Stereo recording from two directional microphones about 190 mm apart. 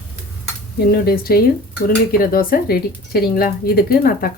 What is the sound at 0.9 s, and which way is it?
A woman's voice, 55° left (ahead or behind).